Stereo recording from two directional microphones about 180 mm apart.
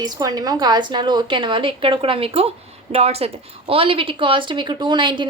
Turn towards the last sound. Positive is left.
turn(degrees=-25)  # may be behind; listen again after turning